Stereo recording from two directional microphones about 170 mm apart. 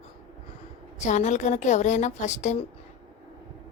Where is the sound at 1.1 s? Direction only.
45° left (ahead or behind).